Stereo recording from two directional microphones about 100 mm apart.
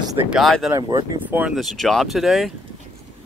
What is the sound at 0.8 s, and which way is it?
Speech, 40° right (ahead or behind).